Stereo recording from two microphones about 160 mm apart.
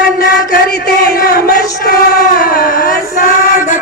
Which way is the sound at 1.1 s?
75° left (ahead or behind).